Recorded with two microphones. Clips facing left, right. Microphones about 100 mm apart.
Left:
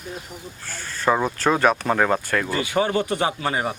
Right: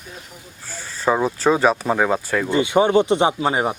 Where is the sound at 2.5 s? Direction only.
25° right (ahead or behind).